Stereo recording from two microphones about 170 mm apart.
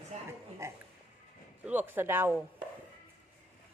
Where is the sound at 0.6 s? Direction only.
15° right (ahead or behind).